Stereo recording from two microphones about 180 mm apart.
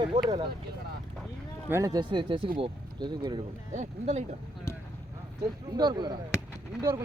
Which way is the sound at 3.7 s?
40° right (ahead or behind).